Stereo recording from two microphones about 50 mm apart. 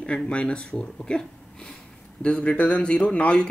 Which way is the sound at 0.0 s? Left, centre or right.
Left.